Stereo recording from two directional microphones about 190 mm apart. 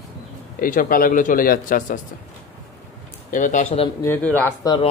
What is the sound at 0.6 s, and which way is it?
Speech, 45° left (ahead or behind).